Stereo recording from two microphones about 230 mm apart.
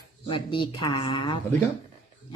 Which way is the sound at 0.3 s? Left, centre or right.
Left.